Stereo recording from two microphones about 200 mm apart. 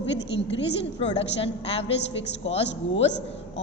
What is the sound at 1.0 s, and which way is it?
A woman's voice, 30° left (ahead or behind).